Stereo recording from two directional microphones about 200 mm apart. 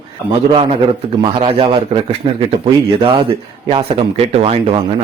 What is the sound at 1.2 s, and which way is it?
Speech, 25° right (ahead or behind).